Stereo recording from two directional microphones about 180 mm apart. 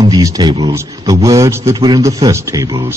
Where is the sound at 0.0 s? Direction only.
20° right (ahead or behind).